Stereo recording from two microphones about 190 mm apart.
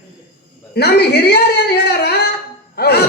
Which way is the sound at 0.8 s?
60° left (ahead or behind).